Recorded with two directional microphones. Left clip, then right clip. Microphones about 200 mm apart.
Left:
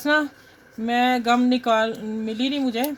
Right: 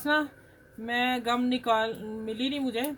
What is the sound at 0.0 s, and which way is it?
Speech, 45° left (ahead or behind).